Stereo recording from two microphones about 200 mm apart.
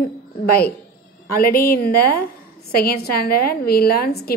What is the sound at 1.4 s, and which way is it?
A woman's voice, 50° left (ahead or behind).